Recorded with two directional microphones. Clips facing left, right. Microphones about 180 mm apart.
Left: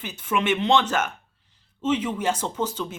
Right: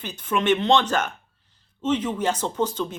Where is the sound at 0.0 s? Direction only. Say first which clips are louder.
Right 1 dB; 5° left (ahead or behind).